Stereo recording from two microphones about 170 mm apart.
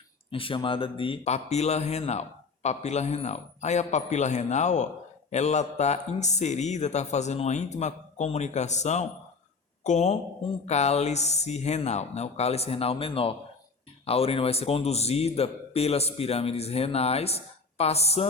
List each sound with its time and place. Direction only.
0.3 s speech: 30° left (ahead or behind)